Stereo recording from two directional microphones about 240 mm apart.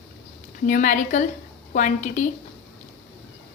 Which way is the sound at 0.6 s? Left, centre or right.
Left.